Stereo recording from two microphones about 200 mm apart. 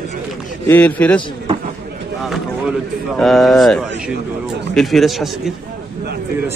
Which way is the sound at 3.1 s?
Centre (ahead or behind).